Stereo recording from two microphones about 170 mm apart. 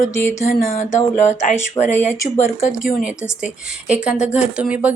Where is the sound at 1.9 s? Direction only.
15° left (ahead or behind).